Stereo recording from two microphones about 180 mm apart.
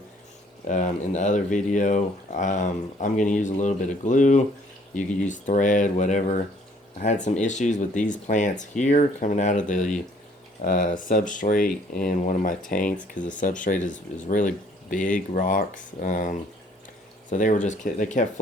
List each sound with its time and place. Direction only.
0.7 s speech: 40° left (ahead or behind)